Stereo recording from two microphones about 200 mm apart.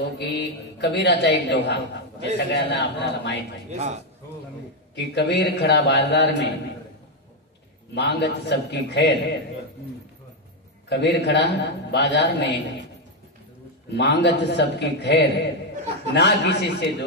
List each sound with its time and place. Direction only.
0.2 s a man's voice: 60° left (ahead or behind)
3.7 s speech: 35° right (ahead or behind)
4.9 s a man's voice: 55° left (ahead or behind)
7.9 s a man's voice: 55° left (ahead or behind)
10.9 s a man's voice: 60° left (ahead or behind)
13.9 s a man's voice: 60° left (ahead or behind)